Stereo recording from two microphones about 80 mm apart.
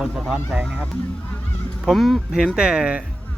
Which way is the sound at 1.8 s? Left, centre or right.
Centre.